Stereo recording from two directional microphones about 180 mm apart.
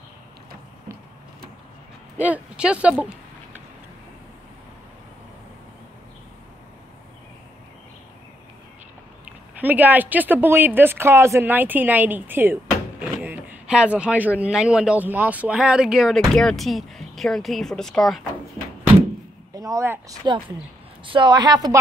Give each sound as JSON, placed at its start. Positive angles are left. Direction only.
{"t": 2.1, "sound": "speech", "side_deg": -10}
{"t": 9.6, "sound": "speech", "side_deg": -10}
{"t": 13.0, "sound": "a sound", "side_deg": -10}
{"t": 14.4, "sound": "speech", "side_deg": -5}
{"t": 19.5, "sound": "speech", "side_deg": -20}
{"t": 20.2, "sound": "a woman's voice", "side_deg": -25}